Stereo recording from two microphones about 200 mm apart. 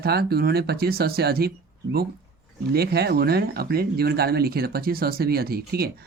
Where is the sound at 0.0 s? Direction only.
50° right (ahead or behind).